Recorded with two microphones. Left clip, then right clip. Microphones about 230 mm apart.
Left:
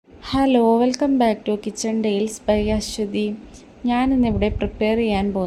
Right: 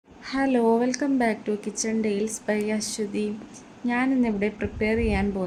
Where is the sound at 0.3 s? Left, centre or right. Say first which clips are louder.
Left 5 dB; centre.